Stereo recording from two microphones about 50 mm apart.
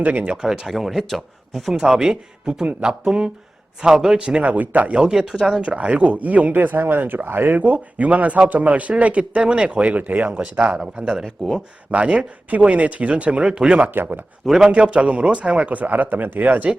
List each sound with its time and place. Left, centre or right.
0.0 s speech: right
0.4 s speech: centre
0.7 s speech: centre
1.7 s speech: centre
4.5 s speech: right
4.9 s speech: centre
5.6 s speech: right
13.9 s speech: right
14.4 s speech: centre
14.7 s speech: right